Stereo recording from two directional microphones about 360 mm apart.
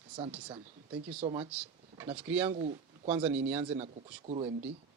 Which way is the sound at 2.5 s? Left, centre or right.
Centre.